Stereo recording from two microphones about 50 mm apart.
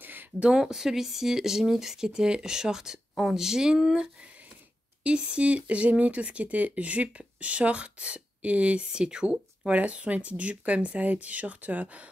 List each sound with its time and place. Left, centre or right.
0.0 s a sound: right
0.4 s speech: centre
5.0 s speech: right